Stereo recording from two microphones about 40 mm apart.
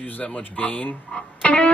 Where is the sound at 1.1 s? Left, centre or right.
Left.